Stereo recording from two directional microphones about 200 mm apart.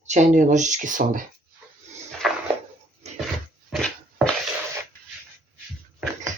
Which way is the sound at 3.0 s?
35° right (ahead or behind).